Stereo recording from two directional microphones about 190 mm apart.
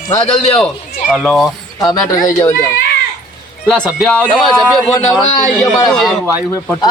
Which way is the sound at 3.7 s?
5° right (ahead or behind).